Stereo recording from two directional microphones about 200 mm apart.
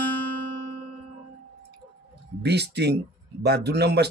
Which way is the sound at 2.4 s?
55° right (ahead or behind).